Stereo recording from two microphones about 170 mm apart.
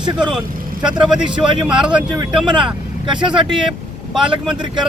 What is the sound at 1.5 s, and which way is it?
Speech, 25° right (ahead or behind).